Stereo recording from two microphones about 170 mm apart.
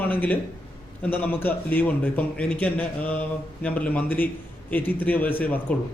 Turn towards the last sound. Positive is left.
turn(degrees=10)  # may be behind; listen again after turning